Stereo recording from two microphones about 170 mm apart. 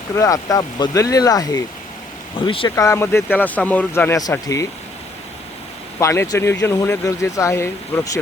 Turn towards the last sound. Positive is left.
turn(degrees=15)  # may be behind; listen again after turning